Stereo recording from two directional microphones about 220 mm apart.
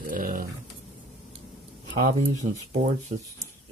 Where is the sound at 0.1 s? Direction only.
40° right (ahead or behind).